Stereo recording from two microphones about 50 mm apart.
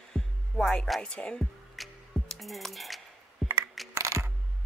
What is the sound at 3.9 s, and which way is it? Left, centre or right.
Coin, right.